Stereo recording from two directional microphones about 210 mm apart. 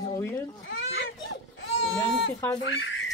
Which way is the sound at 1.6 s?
65° left (ahead or behind).